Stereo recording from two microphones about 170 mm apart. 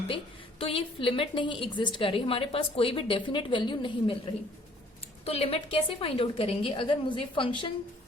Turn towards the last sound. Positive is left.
turn(degrees=30)  # may be behind; listen again after turning